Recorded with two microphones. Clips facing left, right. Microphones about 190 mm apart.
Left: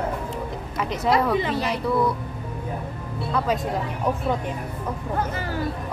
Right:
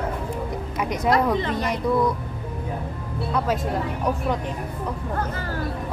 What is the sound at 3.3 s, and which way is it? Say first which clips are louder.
Speech: even; centre (ahead or behind).